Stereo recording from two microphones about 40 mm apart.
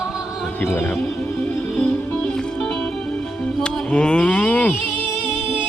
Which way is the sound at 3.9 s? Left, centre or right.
Left.